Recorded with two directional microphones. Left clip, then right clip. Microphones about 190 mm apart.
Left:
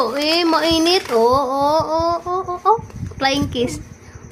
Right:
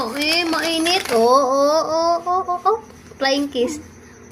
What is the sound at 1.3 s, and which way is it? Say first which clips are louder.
Speech: right 1 dB; 10° left (ahead or behind).